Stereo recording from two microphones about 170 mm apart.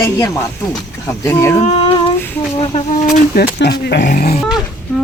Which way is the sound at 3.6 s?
80° left.